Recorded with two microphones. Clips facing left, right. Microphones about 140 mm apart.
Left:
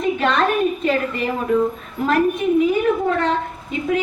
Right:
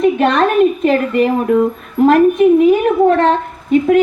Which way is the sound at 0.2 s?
45° right (ahead or behind).